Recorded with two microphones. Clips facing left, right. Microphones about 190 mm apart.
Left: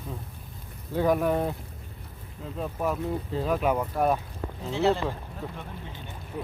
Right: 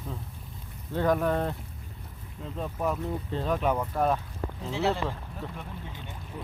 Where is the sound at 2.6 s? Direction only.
5° left (ahead or behind).